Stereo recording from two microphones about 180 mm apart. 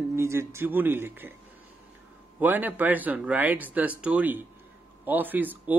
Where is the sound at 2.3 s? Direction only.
10° right (ahead or behind).